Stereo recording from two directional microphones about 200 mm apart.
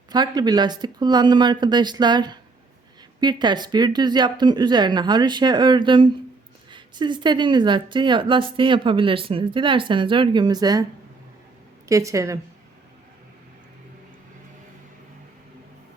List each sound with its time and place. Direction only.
0.1 s a woman's voice: 20° right (ahead or behind)
11.9 s a woman's voice: 15° right (ahead or behind)